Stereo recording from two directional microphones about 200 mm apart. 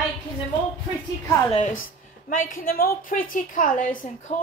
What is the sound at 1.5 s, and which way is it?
A woman's voice, 35° left (ahead or behind).